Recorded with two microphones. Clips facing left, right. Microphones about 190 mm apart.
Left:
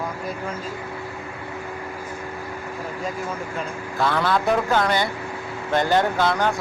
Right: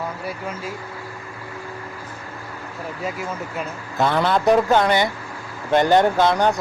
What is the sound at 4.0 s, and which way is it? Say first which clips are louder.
A man's voice: right 3 dB; 20° right (ahead or behind).